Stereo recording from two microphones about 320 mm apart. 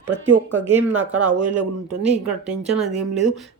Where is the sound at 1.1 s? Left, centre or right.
Right.